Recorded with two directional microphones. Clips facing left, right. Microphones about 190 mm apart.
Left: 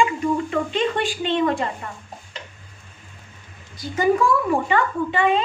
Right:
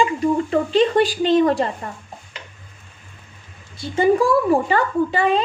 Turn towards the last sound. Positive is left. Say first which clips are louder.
# right 2 dB
turn(degrees=-35)  # may be behind; listen again after turning